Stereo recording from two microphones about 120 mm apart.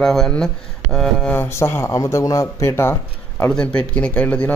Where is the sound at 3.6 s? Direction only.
10° left (ahead or behind).